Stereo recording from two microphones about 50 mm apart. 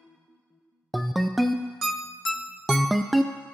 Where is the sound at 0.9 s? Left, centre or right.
Centre.